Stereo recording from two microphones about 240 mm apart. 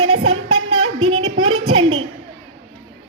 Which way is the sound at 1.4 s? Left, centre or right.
Right.